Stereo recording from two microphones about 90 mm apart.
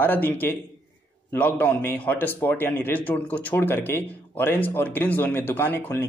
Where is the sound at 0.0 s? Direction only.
20° left (ahead or behind).